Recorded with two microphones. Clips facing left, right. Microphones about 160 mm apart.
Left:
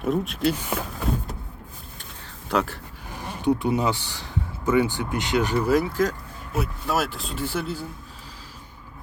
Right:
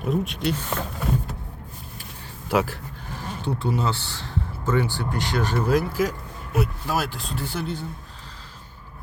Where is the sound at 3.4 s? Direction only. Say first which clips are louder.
Left 4 dB; 15° left (ahead or behind).